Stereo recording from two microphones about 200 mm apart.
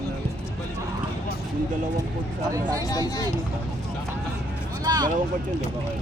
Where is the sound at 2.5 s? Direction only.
15° right (ahead or behind).